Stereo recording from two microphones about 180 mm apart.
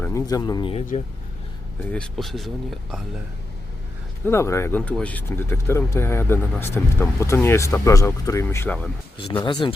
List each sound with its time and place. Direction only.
0.0 s speech: 20° left (ahead or behind)
1.9 s speech: 5° left (ahead or behind)
4.3 s speech: 15° left (ahead or behind)
9.4 s speech: 25° left (ahead or behind)